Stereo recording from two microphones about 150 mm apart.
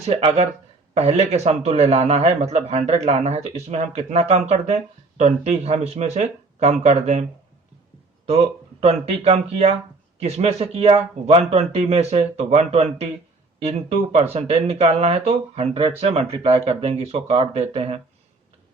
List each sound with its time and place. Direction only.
0.0 s a man's voice: 45° right (ahead or behind)
8.3 s a man's voice: 45° right (ahead or behind)